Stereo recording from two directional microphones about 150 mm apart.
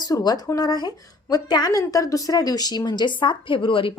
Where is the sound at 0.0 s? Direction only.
25° left (ahead or behind).